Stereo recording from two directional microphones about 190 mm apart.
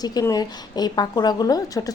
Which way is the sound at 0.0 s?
20° left (ahead or behind).